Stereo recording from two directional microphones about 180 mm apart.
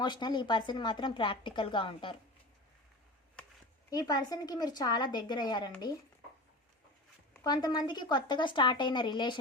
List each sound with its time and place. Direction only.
0.0 s a woman's voice: 25° left (ahead or behind)
3.8 s a woman's voice: 20° left (ahead or behind)
7.4 s a woman's voice: 25° left (ahead or behind)